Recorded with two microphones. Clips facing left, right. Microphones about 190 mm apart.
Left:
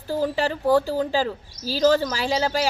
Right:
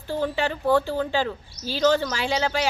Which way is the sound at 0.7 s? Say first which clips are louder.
Left 2 dB; 35° left (ahead or behind).